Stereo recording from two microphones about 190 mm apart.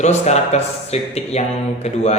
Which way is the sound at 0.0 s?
35° left (ahead or behind).